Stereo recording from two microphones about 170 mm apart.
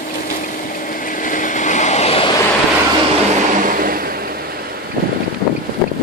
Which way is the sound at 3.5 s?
50° right (ahead or behind).